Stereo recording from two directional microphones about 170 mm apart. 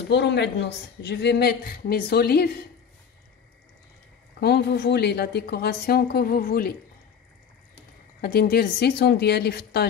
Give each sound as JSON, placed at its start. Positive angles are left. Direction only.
{"t": 0.1, "sound": "a woman's voice", "side_deg": 90}
{"t": 4.4, "sound": "a woman's voice", "side_deg": 70}
{"t": 8.2, "sound": "a woman's voice", "side_deg": 65}